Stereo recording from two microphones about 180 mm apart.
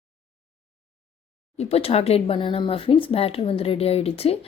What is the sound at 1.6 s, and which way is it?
A woman's voice, 35° left (ahead or behind).